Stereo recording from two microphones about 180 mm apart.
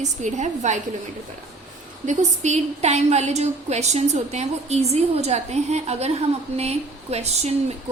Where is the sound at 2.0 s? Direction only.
40° right (ahead or behind).